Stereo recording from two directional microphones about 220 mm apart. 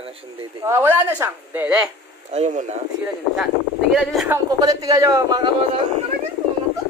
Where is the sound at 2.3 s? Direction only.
30° right (ahead or behind).